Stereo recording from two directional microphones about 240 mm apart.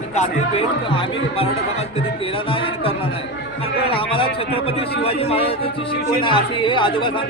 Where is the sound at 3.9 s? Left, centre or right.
Left.